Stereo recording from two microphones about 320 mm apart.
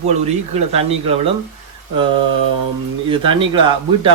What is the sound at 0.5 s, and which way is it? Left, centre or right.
Speech, centre.